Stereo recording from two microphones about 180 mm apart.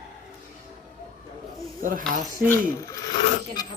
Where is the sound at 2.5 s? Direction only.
20° left (ahead or behind).